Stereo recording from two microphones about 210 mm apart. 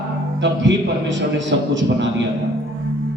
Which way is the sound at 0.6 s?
60° right (ahead or behind).